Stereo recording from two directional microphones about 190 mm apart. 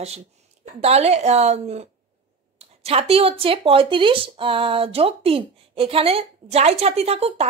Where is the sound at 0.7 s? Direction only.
35° right (ahead or behind).